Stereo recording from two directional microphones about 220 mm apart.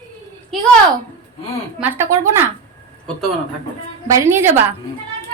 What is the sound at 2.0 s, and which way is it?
Speech, 10° right (ahead or behind).